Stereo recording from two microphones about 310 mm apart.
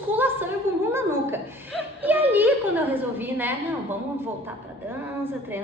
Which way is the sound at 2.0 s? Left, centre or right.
Centre.